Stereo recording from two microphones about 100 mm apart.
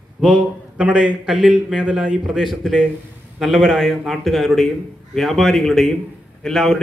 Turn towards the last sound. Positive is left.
turn(degrees=0)  # may be behind; listen again after turning